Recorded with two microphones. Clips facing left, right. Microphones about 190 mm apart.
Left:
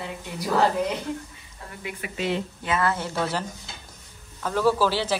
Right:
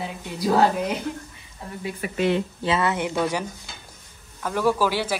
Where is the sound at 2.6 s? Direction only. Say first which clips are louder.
Right 1 dB; 25° right (ahead or behind).